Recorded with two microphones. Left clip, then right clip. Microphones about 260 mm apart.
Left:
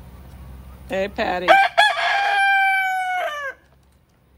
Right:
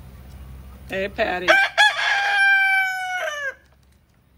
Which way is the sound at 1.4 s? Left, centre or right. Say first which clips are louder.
Left 2 dB; left.